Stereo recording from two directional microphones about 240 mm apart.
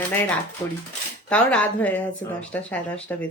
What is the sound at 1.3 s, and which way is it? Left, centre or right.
Speech, centre.